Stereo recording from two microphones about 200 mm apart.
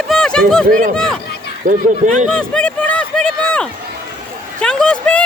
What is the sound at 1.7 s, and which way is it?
Speech, 40° right (ahead or behind).